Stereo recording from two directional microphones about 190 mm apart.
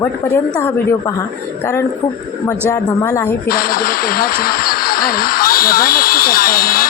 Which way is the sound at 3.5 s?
50° left (ahead or behind).